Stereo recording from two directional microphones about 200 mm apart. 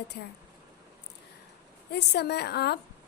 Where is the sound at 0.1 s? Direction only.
55° left (ahead or behind).